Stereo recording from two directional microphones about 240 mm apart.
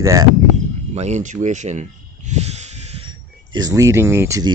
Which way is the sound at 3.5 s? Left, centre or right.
Centre.